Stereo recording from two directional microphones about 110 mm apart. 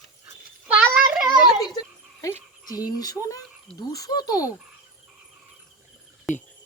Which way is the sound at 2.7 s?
35° left (ahead or behind).